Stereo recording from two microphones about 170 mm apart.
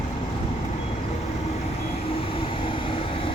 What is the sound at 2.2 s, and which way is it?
Vehicle, 35° left (ahead or behind).